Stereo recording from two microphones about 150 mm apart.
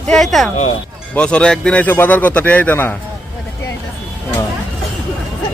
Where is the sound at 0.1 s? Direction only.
Centre (ahead or behind).